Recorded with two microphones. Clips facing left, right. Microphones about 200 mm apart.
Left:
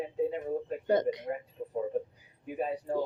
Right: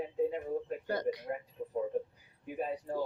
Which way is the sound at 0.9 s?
20° left (ahead or behind).